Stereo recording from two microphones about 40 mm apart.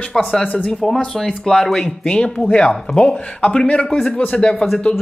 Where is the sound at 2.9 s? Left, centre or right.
Left.